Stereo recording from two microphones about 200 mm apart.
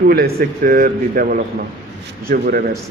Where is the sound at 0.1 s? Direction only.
50° right (ahead or behind).